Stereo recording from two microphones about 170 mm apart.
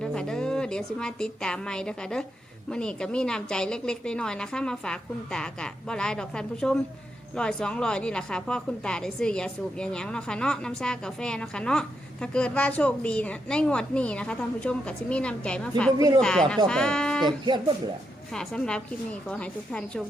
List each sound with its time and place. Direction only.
0.0 s a woman's voice: 5° left (ahead or behind)
16.0 s speech: 20° right (ahead or behind)
16.2 s a woman's voice: 5° left (ahead or behind)
18.3 s a woman's voice: 5° left (ahead or behind)